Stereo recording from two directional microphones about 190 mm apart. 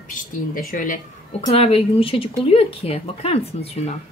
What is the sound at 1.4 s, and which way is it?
Speech, 30° left (ahead or behind).